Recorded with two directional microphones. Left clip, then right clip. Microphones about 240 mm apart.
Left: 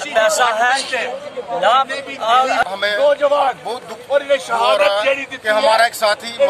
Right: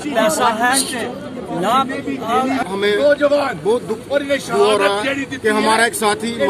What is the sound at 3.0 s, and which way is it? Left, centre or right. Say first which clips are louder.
Speech: left 1 dB; centre.